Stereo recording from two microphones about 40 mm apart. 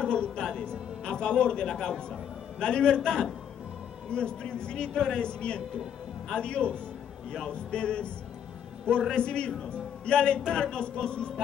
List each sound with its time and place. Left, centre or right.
0.0 s music: left
2.6 s a man's voice: left
9.1 s a man's voice: left